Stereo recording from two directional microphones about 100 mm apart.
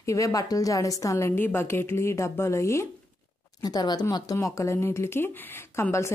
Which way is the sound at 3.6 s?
40° left (ahead or behind).